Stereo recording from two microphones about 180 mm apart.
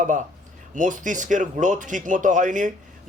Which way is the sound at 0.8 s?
45° right (ahead or behind).